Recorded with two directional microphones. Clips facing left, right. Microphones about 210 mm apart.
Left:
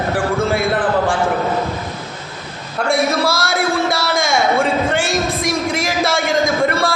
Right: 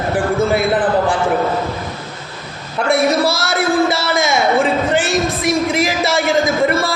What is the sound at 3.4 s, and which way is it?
A man's voice, 5° right (ahead or behind).